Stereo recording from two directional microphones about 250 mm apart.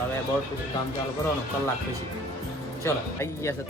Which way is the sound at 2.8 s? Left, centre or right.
Centre.